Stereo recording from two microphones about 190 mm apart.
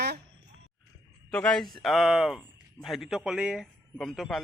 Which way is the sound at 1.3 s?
5° left (ahead or behind).